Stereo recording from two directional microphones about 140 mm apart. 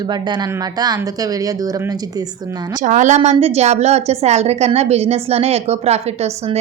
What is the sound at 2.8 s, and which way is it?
Speech, 60° right (ahead or behind).